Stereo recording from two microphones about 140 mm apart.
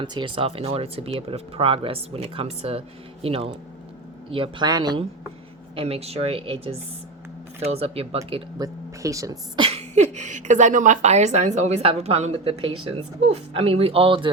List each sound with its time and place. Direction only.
0.0 s a woman's voice: 35° right (ahead or behind)
5.7 s a woman's voice: 45° right (ahead or behind)
8.5 s speech: 25° right (ahead or behind)
9.6 s a woman's voice: 50° right (ahead or behind)